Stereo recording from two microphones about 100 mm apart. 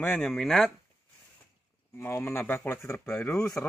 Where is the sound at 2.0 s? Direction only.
25° left (ahead or behind).